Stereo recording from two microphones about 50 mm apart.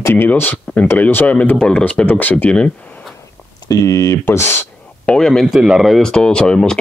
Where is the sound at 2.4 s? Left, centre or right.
Left.